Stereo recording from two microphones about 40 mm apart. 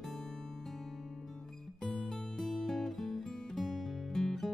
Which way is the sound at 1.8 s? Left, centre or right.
Centre.